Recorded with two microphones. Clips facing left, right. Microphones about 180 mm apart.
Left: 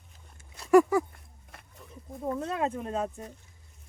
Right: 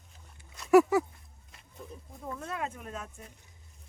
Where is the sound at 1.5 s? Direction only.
60° left (ahead or behind).